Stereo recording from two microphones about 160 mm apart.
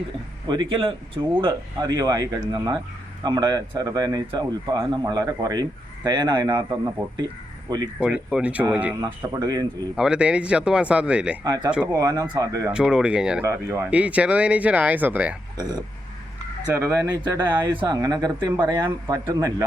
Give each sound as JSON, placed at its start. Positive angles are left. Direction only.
{"t": 0.4, "sound": "speech", "side_deg": -30}
{"t": 7.9, "sound": "speech", "side_deg": -5}
{"t": 9.0, "sound": "speech", "side_deg": -25}
{"t": 9.9, "sound": "speech", "side_deg": -5}
{"t": 11.4, "sound": "speech", "side_deg": -25}
{"t": 12.7, "sound": "speech", "side_deg": -5}
{"t": 13.5, "sound": "speech", "side_deg": -20}
{"t": 16.7, "sound": "speech", "side_deg": -15}
{"t": 17.8, "sound": "speech", "side_deg": -25}